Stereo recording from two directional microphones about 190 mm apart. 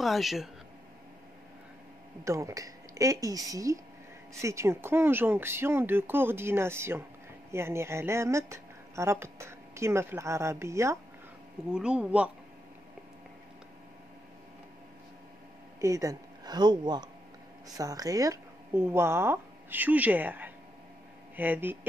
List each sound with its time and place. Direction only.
0.0 s speech: centre (ahead or behind)
2.2 s speech: 15° right (ahead or behind)
15.8 s speech: 15° right (ahead or behind)